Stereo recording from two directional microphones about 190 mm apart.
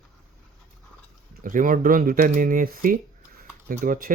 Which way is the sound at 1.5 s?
45° right (ahead or behind).